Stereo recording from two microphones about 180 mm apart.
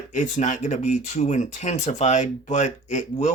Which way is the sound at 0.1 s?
45° left (ahead or behind).